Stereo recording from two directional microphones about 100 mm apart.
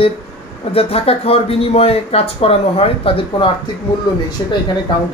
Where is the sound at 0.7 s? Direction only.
80° left.